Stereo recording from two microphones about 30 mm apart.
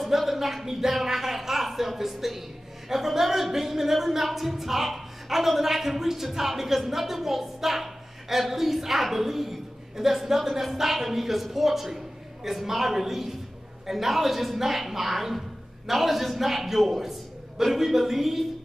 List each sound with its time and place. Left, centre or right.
0.0 s a man's voice: centre